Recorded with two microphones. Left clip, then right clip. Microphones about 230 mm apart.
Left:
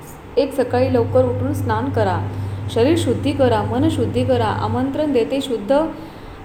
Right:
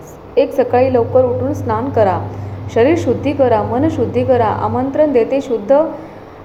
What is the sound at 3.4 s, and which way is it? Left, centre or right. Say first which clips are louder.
Speech: right 4 dB; centre.